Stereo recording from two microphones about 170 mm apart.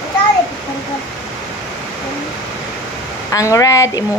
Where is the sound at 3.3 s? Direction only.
20° left (ahead or behind).